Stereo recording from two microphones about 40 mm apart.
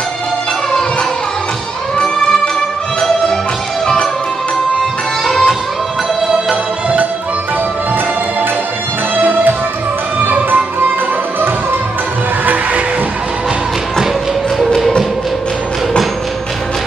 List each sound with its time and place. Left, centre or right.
3.8 s music: centre
5.2 s music: centre
9.1 s music: right